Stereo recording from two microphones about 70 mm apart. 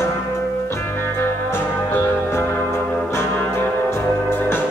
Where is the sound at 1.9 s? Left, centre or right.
Left.